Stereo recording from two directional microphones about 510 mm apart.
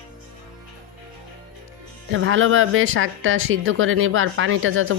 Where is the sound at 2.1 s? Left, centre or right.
Right.